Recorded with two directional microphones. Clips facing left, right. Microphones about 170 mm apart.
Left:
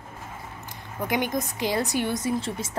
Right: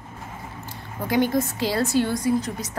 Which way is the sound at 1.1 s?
20° left (ahead or behind).